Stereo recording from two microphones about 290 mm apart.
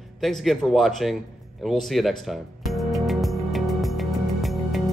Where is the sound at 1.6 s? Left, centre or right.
Centre.